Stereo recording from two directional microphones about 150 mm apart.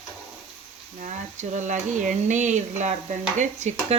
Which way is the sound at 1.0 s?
50° right (ahead or behind).